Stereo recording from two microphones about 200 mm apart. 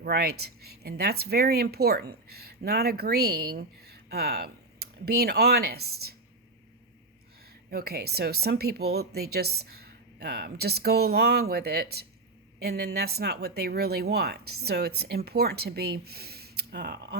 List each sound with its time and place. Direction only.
0.0 s speech: 50° right (ahead or behind)
7.7 s speech: 50° right (ahead or behind)